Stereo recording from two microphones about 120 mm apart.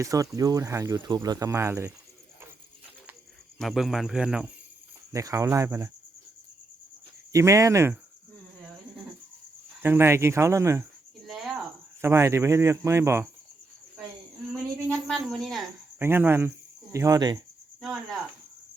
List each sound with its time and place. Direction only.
0.0 s speech: 30° right (ahead or behind)
3.6 s speech: centre (ahead or behind)
5.1 s speech: 25° right (ahead or behind)
7.3 s speech: 25° right (ahead or behind)
9.8 s speech: 20° right (ahead or behind)
11.3 s cricket: centre (ahead or behind)
12.0 s speech: 25° right (ahead or behind)
14.8 s speech: 5° left (ahead or behind)
16.0 s speech: 20° right (ahead or behind)
16.9 s cricket: 30° right (ahead or behind)
17.7 s speech: centre (ahead or behind)